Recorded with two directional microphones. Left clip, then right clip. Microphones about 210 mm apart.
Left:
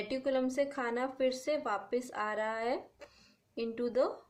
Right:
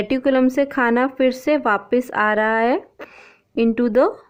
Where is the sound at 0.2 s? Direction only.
55° right (ahead or behind).